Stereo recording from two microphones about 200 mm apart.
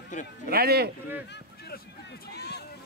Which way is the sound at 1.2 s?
55° left (ahead or behind).